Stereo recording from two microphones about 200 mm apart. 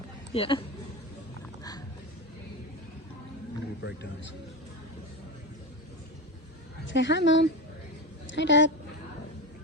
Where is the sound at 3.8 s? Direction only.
60° left (ahead or behind).